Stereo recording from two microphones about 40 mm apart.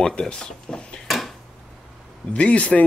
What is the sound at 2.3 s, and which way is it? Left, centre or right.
Speech, left.